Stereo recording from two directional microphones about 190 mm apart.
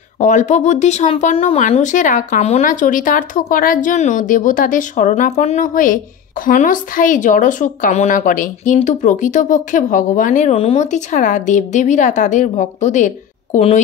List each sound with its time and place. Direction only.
0.2 s speech: 40° left (ahead or behind)